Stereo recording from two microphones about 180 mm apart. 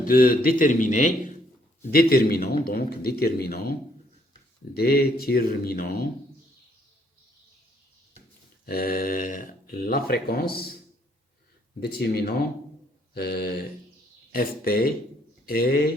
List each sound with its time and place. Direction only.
0.0 s a man's voice: 55° left (ahead or behind)
1.8 s speech: 55° left (ahead or behind)
8.6 s speech: 55° left (ahead or behind)
11.8 s speech: 60° left (ahead or behind)